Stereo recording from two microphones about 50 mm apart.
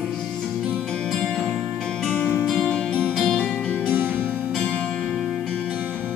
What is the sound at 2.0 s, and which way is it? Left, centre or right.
Music, centre.